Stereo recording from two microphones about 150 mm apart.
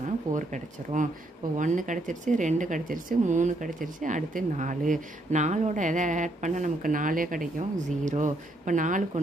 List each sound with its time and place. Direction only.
0.0 s speech: 55° right (ahead or behind)